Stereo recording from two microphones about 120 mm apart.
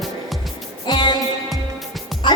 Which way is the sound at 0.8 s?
40° left (ahead or behind).